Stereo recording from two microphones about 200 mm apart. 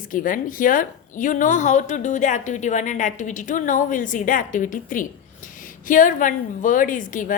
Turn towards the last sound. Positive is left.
turn(degrees=40)  # may be behind; listen again after turning